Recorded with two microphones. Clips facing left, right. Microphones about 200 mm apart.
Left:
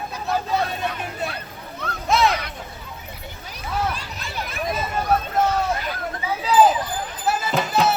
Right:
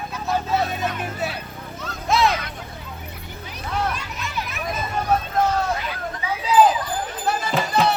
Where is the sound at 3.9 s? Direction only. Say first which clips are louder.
Right 2 dB; 30° left (ahead or behind).